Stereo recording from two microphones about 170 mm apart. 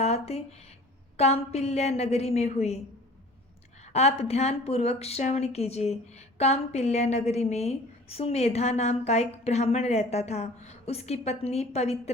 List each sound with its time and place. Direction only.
0.0 s speech: 40° left (ahead or behind)
3.9 s speech: 40° left (ahead or behind)